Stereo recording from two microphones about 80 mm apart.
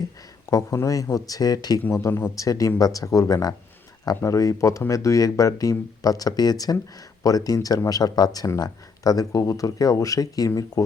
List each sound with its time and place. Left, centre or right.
0.5 s speech: left
1.9 s speech: left
2.3 s speech: left